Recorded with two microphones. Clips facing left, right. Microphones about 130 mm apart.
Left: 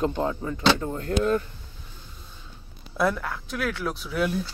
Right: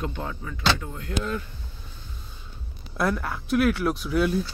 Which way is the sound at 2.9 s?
Centre (ahead or behind).